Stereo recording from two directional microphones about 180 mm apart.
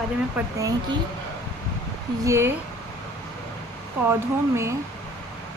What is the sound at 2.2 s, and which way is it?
Speech, 15° right (ahead or behind).